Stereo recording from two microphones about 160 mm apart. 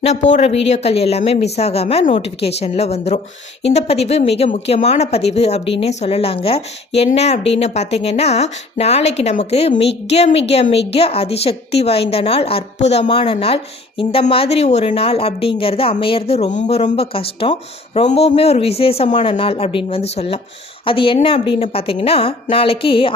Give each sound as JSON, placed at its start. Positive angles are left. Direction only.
{"t": 0.0, "sound": "speech", "side_deg": 45}